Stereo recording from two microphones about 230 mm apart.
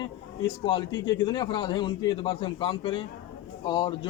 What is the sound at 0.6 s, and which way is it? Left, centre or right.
A man's voice, left.